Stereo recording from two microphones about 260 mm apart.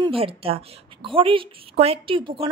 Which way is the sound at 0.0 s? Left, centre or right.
Right.